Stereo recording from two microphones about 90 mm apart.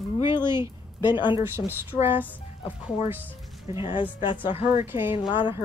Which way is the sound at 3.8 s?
70° left (ahead or behind).